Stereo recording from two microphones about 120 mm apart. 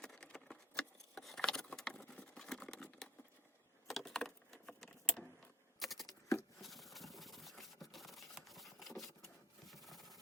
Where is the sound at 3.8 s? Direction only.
Centre (ahead or behind).